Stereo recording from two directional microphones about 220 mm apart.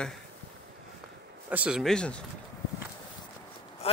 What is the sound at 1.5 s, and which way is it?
Speech, 5° right (ahead or behind).